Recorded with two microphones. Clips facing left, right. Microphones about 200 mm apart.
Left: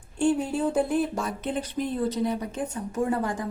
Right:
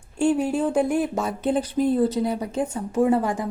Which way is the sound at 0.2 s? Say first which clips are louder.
Right 3 dB; 10° right (ahead or behind).